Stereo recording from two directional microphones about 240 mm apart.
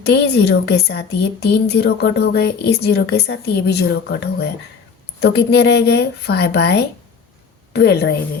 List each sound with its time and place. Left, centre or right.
0.0 s speech: left